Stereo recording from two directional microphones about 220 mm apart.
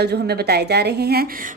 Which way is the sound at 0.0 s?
45° right (ahead or behind).